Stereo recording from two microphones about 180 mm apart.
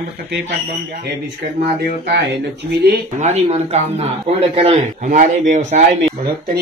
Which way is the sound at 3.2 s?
40° right (ahead or behind).